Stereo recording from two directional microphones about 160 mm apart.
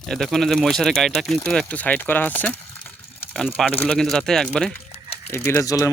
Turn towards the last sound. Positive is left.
turn(degrees=20)  # may be behind; listen again after turning